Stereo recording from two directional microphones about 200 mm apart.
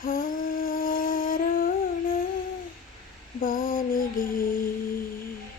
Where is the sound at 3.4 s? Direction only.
45° left (ahead or behind).